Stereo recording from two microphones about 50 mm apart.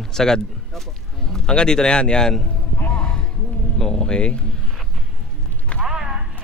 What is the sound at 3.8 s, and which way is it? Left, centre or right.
Speech, centre.